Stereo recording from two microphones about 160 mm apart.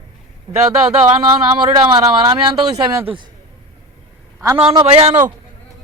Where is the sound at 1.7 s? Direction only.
25° right (ahead or behind).